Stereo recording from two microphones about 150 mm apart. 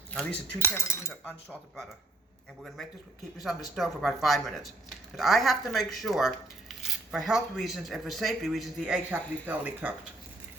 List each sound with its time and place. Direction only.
0.7 s cutlery: 15° left (ahead or behind)
3.3 s speech: centre (ahead or behind)